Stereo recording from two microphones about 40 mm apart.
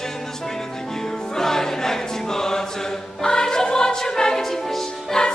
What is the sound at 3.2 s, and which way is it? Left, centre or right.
Music, centre.